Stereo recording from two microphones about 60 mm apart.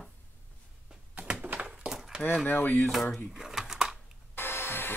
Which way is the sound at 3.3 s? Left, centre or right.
Centre.